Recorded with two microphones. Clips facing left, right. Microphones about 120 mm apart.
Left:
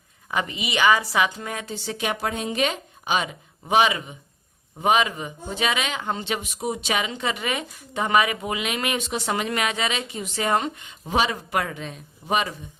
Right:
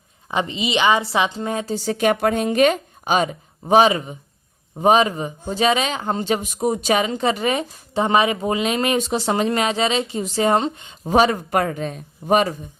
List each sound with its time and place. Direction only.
0.3 s speech: 25° right (ahead or behind)
11.1 s speech: 45° right (ahead or behind)